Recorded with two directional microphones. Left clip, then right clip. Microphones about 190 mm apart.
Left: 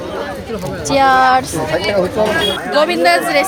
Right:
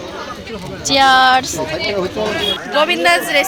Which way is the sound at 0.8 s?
Centre (ahead or behind).